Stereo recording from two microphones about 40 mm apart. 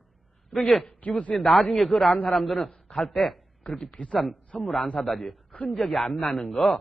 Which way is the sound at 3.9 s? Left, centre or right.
Left.